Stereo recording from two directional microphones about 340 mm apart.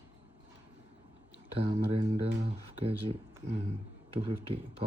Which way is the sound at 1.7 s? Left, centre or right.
Centre.